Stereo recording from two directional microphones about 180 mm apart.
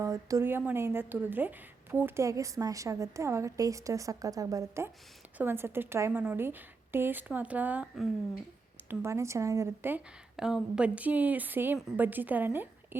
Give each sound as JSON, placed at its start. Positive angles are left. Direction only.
{"t": 0.0, "sound": "a woman's voice", "side_deg": -15}